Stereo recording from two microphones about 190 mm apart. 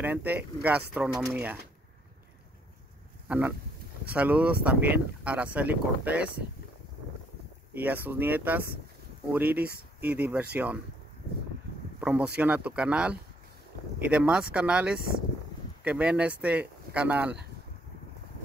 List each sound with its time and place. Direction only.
0.0 s speech: 10° right (ahead or behind)
3.3 s speech: 5° right (ahead or behind)
7.7 s speech: 10° right (ahead or behind)
9.6 s speech: 55° right (ahead or behind)
10.0 s speech: 10° right (ahead or behind)
12.0 s speech: 5° right (ahead or behind)